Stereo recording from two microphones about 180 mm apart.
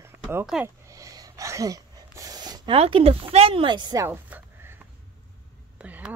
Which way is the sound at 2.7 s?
35° right (ahead or behind).